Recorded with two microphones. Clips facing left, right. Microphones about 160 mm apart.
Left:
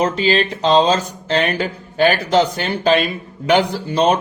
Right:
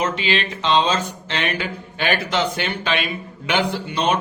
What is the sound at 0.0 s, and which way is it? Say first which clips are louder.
Speech: left 6 dB; 40° left (ahead or behind).